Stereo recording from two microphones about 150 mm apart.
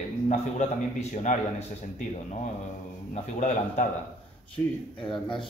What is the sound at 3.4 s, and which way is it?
Speech, 50° left (ahead or behind).